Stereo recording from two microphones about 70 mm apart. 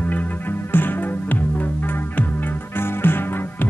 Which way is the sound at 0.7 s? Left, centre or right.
Left.